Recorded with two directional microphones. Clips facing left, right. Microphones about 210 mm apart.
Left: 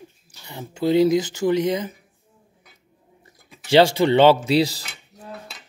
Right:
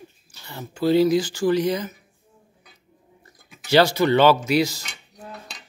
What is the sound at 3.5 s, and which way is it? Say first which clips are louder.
Speech: left 2 dB; 25° left (ahead or behind).